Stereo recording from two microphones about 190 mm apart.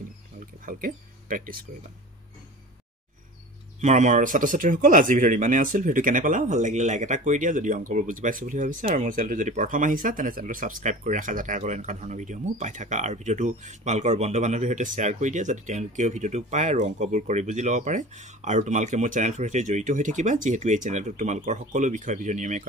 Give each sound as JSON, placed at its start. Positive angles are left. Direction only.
{"t": 0.7, "sound": "speech", "side_deg": -45}
{"t": 3.8, "sound": "speech", "side_deg": -40}